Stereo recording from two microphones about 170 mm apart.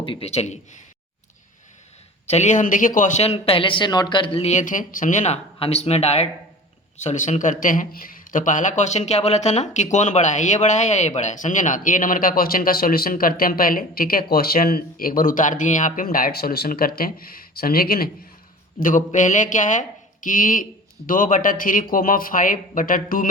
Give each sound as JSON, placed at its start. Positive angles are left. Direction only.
{"t": 0.0, "sound": "a man's voice", "side_deg": 35}
{"t": 2.2, "sound": "a man's voice", "side_deg": 40}
{"t": 18.8, "sound": "a man's voice", "side_deg": 50}